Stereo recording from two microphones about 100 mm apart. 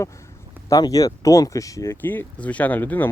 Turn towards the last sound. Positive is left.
turn(degrees=20)  # may be behind; listen again after turning